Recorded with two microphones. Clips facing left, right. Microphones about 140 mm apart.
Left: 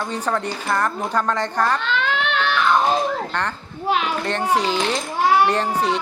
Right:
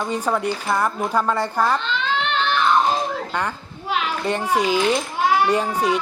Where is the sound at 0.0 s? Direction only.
10° right (ahead or behind).